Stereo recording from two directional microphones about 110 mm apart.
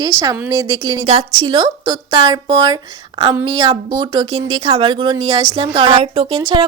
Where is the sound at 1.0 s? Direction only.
55° right (ahead or behind).